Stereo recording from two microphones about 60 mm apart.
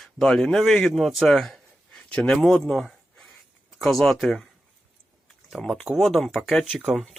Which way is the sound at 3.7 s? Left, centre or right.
Centre.